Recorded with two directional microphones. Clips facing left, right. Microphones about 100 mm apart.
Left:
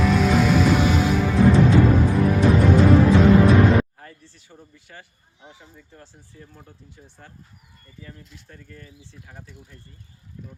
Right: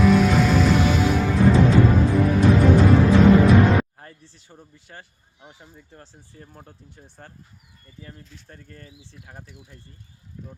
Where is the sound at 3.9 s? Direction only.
30° right (ahead or behind).